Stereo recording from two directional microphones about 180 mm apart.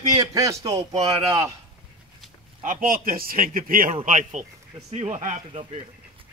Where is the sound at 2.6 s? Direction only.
50° right (ahead or behind).